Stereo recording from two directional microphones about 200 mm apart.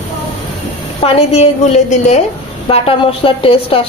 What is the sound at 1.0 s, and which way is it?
A woman's voice, 30° left (ahead or behind).